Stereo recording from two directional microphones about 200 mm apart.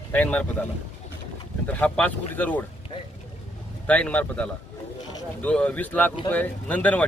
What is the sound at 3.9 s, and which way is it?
Speech, 5° left (ahead or behind).